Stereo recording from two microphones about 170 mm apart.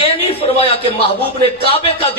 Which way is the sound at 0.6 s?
35° left (ahead or behind).